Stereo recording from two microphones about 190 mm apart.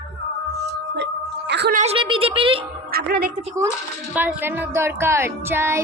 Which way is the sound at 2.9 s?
55° right (ahead or behind).